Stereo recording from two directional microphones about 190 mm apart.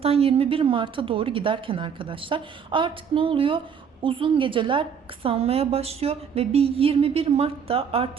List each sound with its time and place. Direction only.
0.0 s a woman's voice: 30° right (ahead or behind)